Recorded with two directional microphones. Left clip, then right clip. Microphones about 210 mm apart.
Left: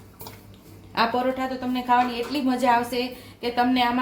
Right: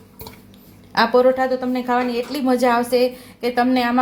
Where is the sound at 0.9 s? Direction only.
35° right (ahead or behind).